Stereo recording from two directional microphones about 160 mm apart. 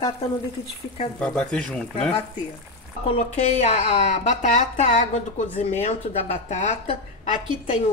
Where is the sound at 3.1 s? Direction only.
40° left (ahead or behind).